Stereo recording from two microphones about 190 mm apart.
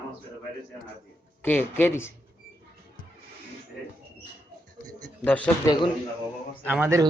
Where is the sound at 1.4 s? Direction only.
10° left (ahead or behind).